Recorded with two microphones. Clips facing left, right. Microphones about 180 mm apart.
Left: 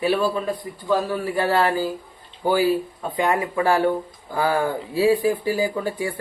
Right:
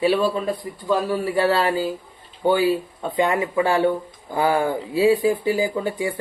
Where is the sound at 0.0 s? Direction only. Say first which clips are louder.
Right 2 dB; 20° right (ahead or behind).